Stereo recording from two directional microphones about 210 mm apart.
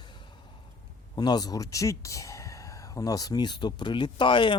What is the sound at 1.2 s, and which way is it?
Speech, 20° left (ahead or behind).